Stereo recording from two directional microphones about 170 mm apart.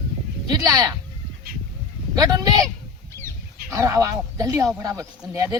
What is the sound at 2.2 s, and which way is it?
Speech, 20° right (ahead or behind).